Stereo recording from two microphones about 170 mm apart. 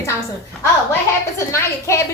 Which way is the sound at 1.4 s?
15° left (ahead or behind).